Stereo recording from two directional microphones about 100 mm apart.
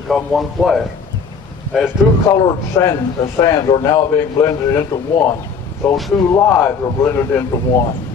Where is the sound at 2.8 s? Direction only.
45° left (ahead or behind).